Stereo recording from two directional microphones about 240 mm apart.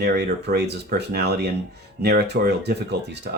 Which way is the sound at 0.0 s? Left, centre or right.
Right.